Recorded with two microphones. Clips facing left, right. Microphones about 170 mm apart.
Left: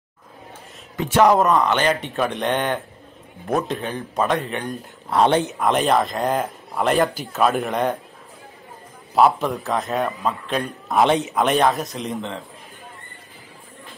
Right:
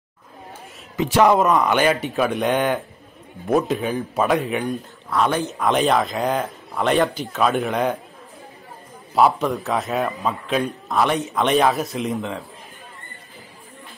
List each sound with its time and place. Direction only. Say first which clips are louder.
1.1 s a man's voice: even; centre (ahead or behind)
1.5 s a man's voice: right 1 dB; 15° right (ahead or behind)
5.1 s speech: left 3 dB; 30° left (ahead or behind)
5.6 s a man's voice: right 4 dB; centre (ahead or behind)
9.1 s a man's voice: even; centre (ahead or behind)
11.0 s speech: left 3 dB; 20° left (ahead or behind)
11.3 s a man's voice: even; centre (ahead or behind)